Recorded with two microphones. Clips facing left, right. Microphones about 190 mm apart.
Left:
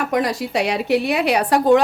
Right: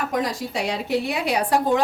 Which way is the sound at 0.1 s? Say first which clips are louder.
Left 5 dB; 70° left (ahead or behind).